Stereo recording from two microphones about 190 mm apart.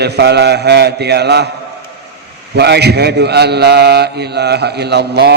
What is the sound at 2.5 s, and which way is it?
A man's voice, 60° right (ahead or behind).